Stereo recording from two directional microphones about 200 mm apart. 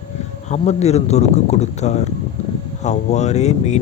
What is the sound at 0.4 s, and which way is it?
Speech, 35° left (ahead or behind).